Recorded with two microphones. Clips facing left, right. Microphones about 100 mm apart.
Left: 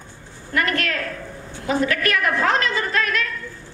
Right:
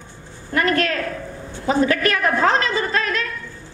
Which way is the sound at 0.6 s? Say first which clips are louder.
Right 3 dB; 30° right (ahead or behind).